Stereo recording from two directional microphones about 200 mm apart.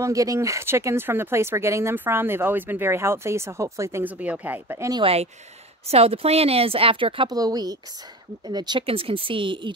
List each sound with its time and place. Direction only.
0.0 s speech: 15° right (ahead or behind)
5.0 s a woman's voice: 30° right (ahead or behind)